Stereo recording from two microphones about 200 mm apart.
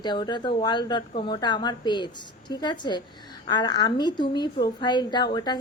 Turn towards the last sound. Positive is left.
turn(degrees=20)  # may be behind; listen again after turning